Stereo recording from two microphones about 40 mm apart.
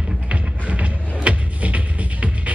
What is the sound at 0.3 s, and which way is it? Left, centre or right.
Music, right.